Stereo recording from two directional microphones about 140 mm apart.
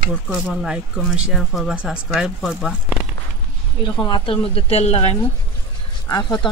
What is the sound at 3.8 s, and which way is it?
A woman's voice, 35° left (ahead or behind).